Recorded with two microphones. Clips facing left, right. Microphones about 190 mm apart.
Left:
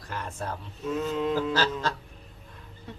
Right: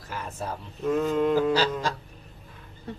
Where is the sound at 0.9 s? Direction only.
55° right (ahead or behind).